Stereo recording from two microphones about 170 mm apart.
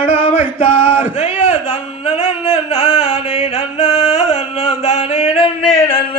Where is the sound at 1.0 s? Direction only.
45° left (ahead or behind).